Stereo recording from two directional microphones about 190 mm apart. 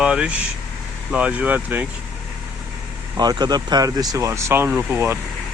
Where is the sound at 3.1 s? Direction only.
20° right (ahead or behind).